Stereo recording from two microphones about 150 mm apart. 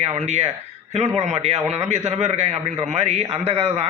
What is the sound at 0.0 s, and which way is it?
Speech, 45° right (ahead or behind).